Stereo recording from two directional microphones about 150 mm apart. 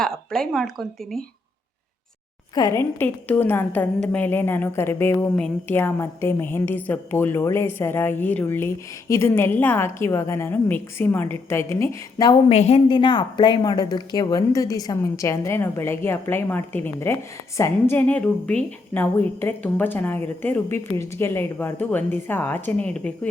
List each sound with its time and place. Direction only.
0.0 s speech: 5° left (ahead or behind)
2.6 s a woman's voice: 20° left (ahead or behind)
12.5 s a woman's voice: 45° left (ahead or behind)
12.9 s a woman's voice: 30° left (ahead or behind); by 23.3 s 10° left (ahead or behind)